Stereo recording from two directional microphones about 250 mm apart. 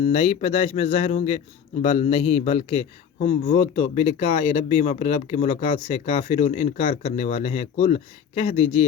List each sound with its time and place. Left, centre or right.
0.0 s a man's voice: left